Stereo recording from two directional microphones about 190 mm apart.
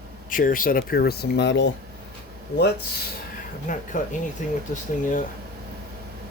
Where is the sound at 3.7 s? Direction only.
45° left (ahead or behind).